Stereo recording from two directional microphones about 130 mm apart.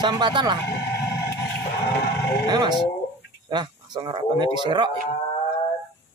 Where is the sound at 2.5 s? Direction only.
35° right (ahead or behind).